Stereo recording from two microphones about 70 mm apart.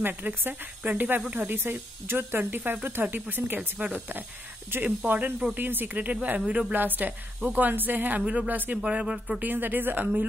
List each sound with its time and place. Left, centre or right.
0.0 s speech: right
8.8 s speech: centre
9.4 s speech: right